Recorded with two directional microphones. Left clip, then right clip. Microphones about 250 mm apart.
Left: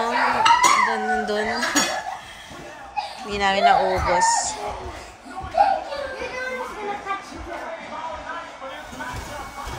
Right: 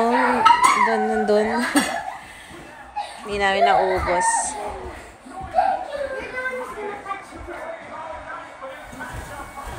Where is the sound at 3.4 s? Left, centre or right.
Centre.